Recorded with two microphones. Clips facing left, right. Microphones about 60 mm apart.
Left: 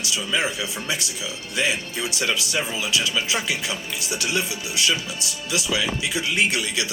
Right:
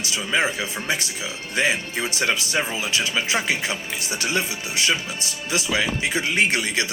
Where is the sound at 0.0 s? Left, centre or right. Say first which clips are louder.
Right 2 dB; right.